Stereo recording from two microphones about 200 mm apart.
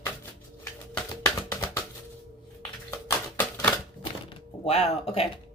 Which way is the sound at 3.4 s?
10° left (ahead or behind).